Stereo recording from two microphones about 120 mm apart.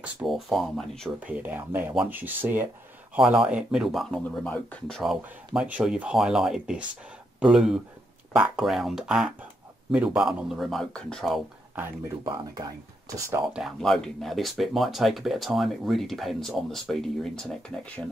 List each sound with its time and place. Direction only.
0.0 s speech: centre (ahead or behind)
1.2 s speech: 15° right (ahead or behind)
3.4 s speech: 5° right (ahead or behind)
12.5 s speech: 30° right (ahead or behind)
13.5 s speech: 5° right (ahead or behind)